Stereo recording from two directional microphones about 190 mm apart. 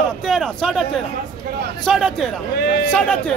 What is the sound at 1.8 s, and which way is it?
A man's voice, centre (ahead or behind).